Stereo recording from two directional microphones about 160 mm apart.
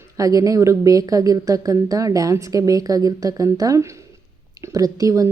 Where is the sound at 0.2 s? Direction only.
20° right (ahead or behind).